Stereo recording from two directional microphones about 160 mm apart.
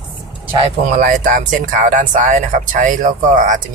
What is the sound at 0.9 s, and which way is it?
Speech, 55° right (ahead or behind).